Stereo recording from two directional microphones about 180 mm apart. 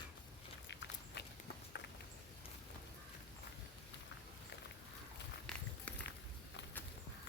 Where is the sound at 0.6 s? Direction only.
80° left.